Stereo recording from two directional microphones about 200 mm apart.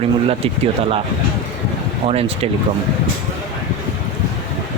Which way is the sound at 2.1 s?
30° right (ahead or behind).